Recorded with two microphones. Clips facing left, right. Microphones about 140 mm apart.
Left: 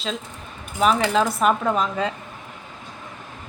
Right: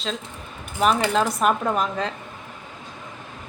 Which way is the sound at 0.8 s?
Centre (ahead or behind).